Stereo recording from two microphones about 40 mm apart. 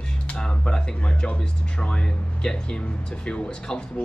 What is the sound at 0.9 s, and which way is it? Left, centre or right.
Speech, left.